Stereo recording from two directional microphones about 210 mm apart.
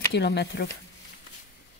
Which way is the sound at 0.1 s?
50° left (ahead or behind).